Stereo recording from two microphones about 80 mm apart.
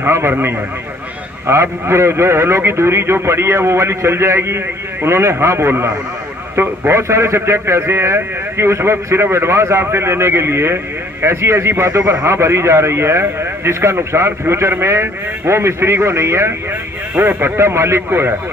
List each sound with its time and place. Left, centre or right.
0.0 s speech: right